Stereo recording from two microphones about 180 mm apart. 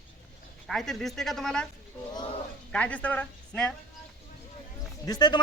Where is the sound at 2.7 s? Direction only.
5° left (ahead or behind).